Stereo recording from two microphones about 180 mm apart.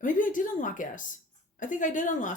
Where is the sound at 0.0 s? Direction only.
45° left (ahead or behind).